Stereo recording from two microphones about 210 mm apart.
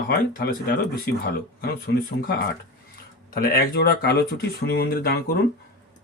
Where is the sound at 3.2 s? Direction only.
45° left (ahead or behind).